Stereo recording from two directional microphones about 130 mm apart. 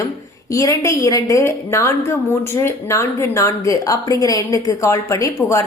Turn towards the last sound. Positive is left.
turn(degrees=25)  # may be behind; listen again after turning